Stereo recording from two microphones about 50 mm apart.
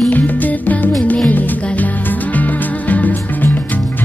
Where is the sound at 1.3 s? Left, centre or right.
Left.